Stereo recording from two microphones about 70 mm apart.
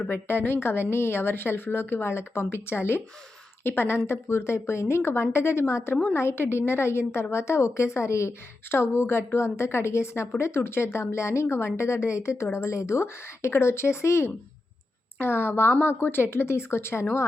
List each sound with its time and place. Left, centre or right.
0.1 s a woman's voice: left